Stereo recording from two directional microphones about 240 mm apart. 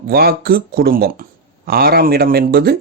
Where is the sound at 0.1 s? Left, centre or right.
Right.